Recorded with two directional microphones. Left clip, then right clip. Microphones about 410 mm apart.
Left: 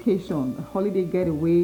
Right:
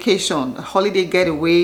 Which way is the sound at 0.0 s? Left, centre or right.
Centre.